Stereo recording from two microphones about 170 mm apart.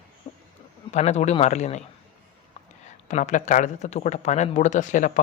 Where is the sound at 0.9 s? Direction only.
40° left (ahead or behind).